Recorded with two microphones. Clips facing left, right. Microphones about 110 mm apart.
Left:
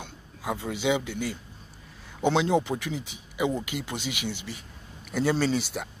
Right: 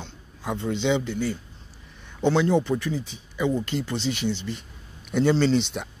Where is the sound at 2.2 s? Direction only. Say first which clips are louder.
Right 2 dB; 15° left (ahead or behind).